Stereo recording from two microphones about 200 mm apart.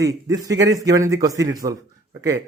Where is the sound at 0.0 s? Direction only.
15° right (ahead or behind).